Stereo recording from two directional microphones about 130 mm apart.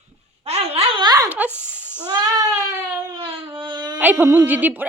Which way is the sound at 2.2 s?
30° right (ahead or behind).